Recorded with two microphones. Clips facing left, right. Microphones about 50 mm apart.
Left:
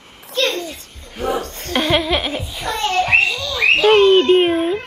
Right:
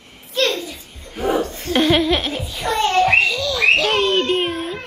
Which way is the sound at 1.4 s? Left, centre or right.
Left.